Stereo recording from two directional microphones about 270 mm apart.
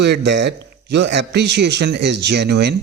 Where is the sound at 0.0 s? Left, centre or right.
Right.